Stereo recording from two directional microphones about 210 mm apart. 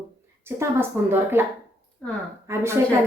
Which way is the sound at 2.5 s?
15° right (ahead or behind).